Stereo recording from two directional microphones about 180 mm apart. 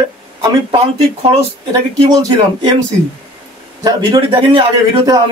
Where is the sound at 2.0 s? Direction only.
25° right (ahead or behind).